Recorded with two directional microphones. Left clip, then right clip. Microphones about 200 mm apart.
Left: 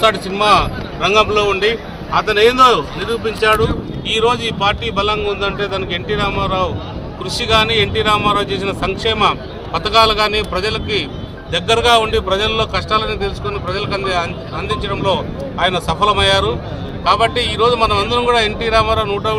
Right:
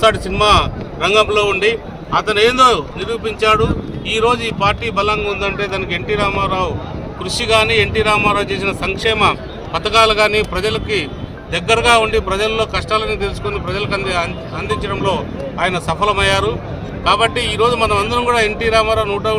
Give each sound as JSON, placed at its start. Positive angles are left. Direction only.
{"t": 0.0, "sound": "speech", "side_deg": -25}
{"t": 4.0, "sound": "a man's voice", "side_deg": -5}